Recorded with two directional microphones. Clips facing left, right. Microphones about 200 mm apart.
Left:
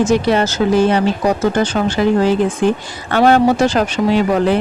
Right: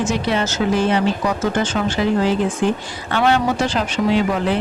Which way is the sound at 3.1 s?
40° left (ahead or behind).